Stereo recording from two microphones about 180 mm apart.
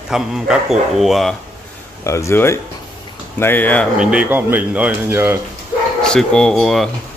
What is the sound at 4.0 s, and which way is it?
Speech, 5° right (ahead or behind).